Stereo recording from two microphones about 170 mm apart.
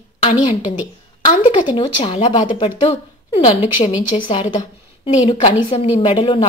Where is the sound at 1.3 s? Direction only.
30° left (ahead or behind).